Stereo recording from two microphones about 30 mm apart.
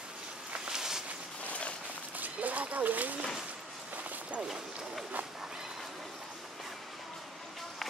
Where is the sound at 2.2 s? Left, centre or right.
Right.